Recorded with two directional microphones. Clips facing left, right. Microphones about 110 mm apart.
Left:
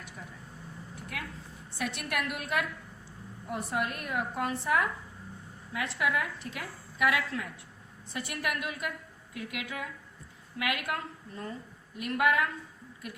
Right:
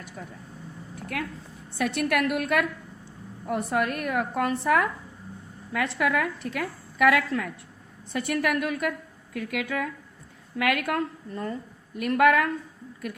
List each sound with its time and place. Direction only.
0.2 s a woman's voice: 45° right (ahead or behind)
1.1 s a woman's voice: 55° right (ahead or behind)